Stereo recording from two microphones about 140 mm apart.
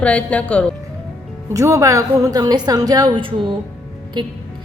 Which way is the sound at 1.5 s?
20° right (ahead or behind).